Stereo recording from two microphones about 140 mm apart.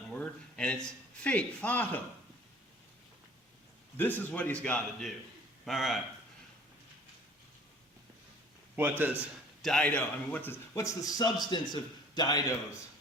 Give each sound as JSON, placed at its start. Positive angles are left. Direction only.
{"t": 0.1, "sound": "speech", "side_deg": 5}
{"t": 3.9, "sound": "a man's voice", "side_deg": 15}
{"t": 8.7, "sound": "a man's voice", "side_deg": -15}
{"t": 9.6, "sound": "a man's voice", "side_deg": 5}